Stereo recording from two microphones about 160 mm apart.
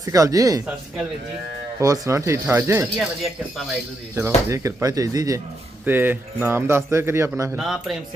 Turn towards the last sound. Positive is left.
turn(degrees=0)  # may be behind; listen again after turning